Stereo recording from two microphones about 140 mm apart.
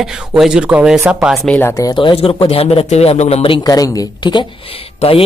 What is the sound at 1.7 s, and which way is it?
Speech, 30° left (ahead or behind).